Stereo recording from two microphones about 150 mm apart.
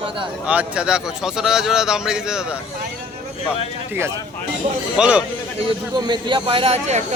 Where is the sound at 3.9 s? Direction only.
15° right (ahead or behind).